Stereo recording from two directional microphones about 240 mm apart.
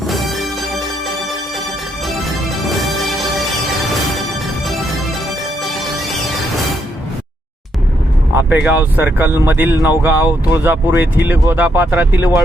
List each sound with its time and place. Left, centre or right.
0.1 s music: centre
8.4 s speech: centre